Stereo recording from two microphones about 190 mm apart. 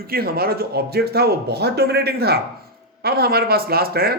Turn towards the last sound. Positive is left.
turn(degrees=-55)  # may be behind; listen again after turning